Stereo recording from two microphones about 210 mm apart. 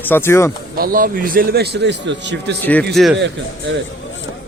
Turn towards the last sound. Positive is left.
turn(degrees=-60)  # may be behind; listen again after turning